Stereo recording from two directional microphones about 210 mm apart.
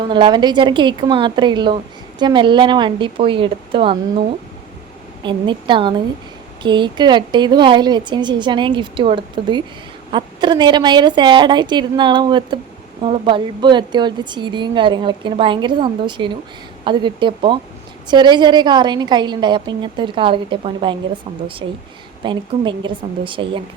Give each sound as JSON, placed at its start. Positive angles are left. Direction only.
{"t": 0.1, "sound": "a woman's voice", "side_deg": -20}
{"t": 5.2, "sound": "a woman's voice", "side_deg": -20}
{"t": 22.2, "sound": "a woman's voice", "side_deg": -20}